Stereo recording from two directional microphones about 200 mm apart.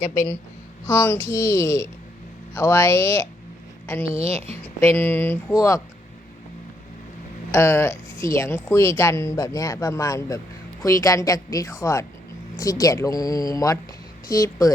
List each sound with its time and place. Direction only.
0.9 s a woman's voice: 15° left (ahead or behind)
4.2 s a woman's voice: 30° right (ahead or behind)
4.5 s a woman's voice: 10° left (ahead or behind)
7.5 s a woman's voice: 15° left (ahead or behind)